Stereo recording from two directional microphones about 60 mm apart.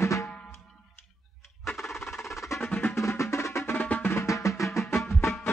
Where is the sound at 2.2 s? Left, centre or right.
Centre.